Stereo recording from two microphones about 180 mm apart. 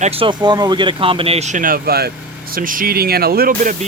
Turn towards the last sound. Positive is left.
turn(degrees=-55)  # may be behind; listen again after turning